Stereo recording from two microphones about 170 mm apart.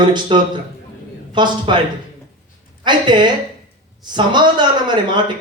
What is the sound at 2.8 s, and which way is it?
Speech, 25° right (ahead or behind).